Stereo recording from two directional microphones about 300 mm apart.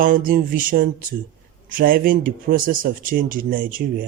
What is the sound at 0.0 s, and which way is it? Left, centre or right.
Speech, right.